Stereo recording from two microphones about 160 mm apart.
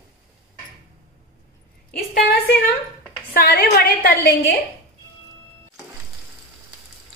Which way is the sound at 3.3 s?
75° left (ahead or behind).